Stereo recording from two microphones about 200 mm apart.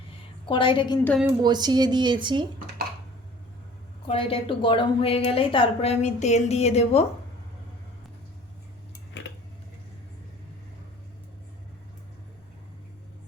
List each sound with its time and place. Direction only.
0.4 s a woman's voice: 25° left (ahead or behind)
1.4 s speech: 20° right (ahead or behind)
4.0 s a woman's voice: 25° left (ahead or behind)